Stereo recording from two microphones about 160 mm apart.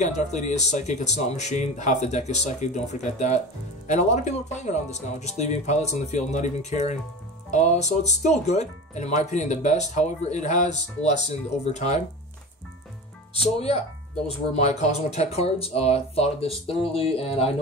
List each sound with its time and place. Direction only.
0.0 s speech: 45° left (ahead or behind)
13.3 s speech: 40° left (ahead or behind)